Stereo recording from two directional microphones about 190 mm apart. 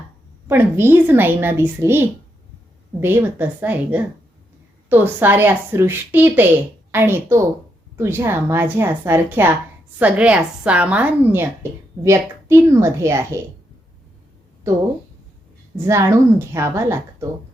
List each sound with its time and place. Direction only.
0.4 s a woman's voice: 10° right (ahead or behind)
15.9 s a woman's voice: 15° right (ahead or behind)